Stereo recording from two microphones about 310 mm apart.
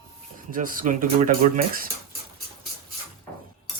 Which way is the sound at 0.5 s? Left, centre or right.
Right.